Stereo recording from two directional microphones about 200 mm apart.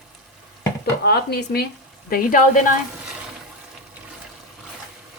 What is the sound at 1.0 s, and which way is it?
Speech, 50° left (ahead or behind).